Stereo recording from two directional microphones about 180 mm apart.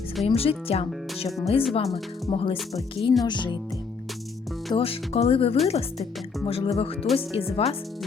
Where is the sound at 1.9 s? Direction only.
30° left (ahead or behind).